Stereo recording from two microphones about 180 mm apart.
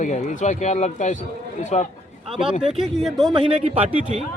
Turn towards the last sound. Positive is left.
turn(degrees=-35)  # may be behind; listen again after turning